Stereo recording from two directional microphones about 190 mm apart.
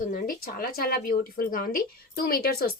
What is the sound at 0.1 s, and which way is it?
A woman's voice, 50° left (ahead or behind).